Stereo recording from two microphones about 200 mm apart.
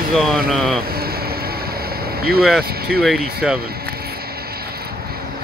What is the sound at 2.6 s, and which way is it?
Speech, 50° right (ahead or behind).